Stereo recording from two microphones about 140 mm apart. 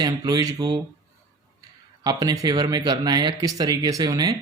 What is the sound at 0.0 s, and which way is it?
Speech, 30° right (ahead or behind).